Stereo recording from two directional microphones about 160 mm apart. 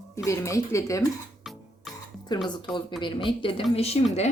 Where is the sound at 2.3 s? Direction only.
30° left (ahead or behind).